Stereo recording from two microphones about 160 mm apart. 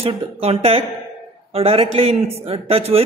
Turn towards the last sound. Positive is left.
turn(degrees=-40)  # may be behind; listen again after turning